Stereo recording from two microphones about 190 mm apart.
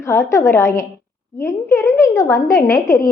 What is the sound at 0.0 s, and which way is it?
A child's voice, 15° left (ahead or behind).